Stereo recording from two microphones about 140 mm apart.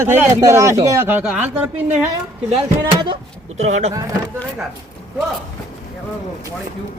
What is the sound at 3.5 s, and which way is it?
Speech, 50° right (ahead or behind).